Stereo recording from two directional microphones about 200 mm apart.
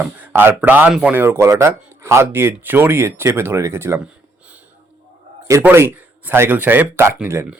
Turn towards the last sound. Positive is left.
turn(degrees=-15)  # may be behind; listen again after turning